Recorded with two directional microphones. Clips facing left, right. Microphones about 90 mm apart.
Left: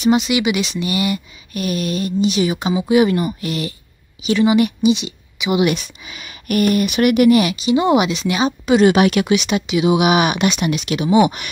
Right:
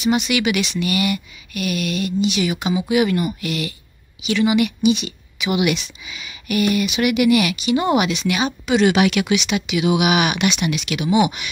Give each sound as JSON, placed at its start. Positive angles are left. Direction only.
{"t": 0.1, "sound": "a woman's voice", "side_deg": 25}
{"t": 4.9, "sound": "a woman's voice", "side_deg": 20}
{"t": 5.8, "sound": "speech", "side_deg": 50}
{"t": 7.7, "sound": "a woman's voice", "side_deg": 20}